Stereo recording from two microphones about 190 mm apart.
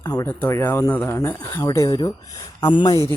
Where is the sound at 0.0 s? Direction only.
15° left (ahead or behind).